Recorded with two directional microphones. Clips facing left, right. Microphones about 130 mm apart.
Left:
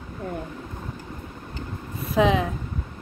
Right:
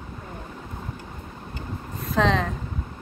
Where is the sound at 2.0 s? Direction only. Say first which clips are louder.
Left 2 dB; 5° left (ahead or behind).